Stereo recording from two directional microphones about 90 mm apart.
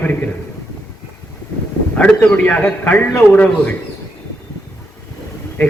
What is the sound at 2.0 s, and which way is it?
A man's voice, 15° left (ahead or behind).